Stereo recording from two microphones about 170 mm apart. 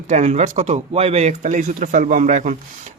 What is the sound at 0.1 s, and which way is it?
Speech, 45° right (ahead or behind).